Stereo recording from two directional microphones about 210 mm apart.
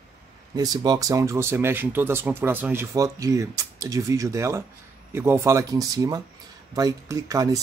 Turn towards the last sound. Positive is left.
turn(degrees=-15)  # may be behind; listen again after turning